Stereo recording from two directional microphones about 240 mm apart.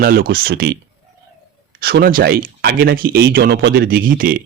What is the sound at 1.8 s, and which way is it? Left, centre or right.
Speech, right.